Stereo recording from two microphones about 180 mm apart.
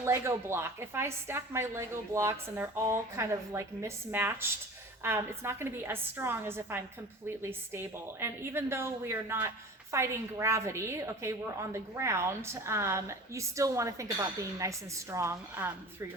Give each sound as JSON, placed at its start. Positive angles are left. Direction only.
{"t": 0.0, "sound": "a woman's voice", "side_deg": -15}